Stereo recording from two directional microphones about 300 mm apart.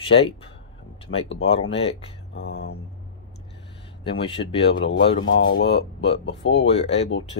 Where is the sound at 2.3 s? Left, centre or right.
Left.